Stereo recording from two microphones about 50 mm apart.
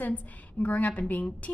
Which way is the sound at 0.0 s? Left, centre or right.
Left.